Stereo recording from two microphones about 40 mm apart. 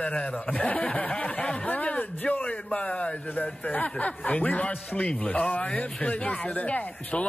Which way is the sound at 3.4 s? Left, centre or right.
Left.